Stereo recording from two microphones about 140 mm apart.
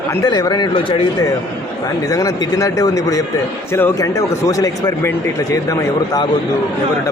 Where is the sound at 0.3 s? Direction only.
30° left (ahead or behind).